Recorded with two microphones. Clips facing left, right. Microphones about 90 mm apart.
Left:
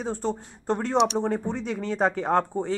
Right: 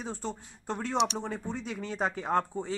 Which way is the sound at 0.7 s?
55° left (ahead or behind).